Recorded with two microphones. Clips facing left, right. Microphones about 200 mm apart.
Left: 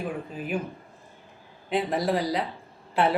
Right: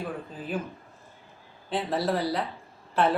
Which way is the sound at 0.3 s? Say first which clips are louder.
Left 2 dB; 15° left (ahead or behind).